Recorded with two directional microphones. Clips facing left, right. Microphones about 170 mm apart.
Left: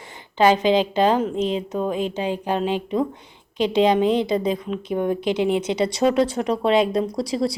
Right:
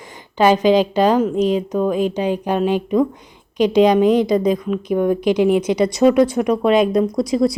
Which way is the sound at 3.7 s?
25° left (ahead or behind).